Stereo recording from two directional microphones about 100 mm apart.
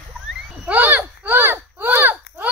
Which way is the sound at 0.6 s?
20° right (ahead or behind).